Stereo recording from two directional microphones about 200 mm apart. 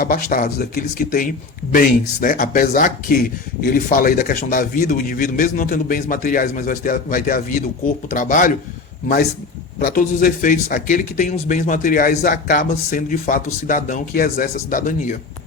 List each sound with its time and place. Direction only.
0.0 s speech: 45° left (ahead or behind)
9.8 s speech: 45° left (ahead or behind)